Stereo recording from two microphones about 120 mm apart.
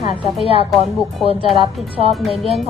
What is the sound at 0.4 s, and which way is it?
Speech, 55° left (ahead or behind).